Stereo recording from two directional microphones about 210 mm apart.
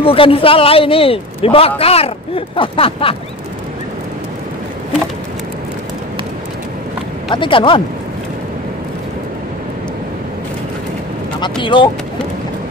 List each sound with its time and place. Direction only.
0.0 s a man's voice: 25° left (ahead or behind)
7.2 s a man's voice: 25° left (ahead or behind)
11.3 s a man's voice: 20° left (ahead or behind)